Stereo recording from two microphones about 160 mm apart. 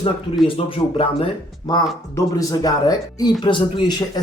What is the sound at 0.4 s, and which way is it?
Speech, 35° left (ahead or behind).